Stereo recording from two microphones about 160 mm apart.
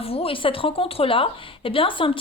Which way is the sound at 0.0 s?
40° left (ahead or behind).